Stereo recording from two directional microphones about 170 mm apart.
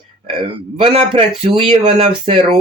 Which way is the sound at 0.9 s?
35° right (ahead or behind).